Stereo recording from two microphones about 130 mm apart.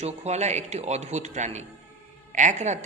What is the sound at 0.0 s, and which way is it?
A man's voice, 60° right (ahead or behind).